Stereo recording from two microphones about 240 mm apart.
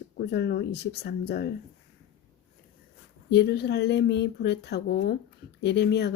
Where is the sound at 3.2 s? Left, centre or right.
Left.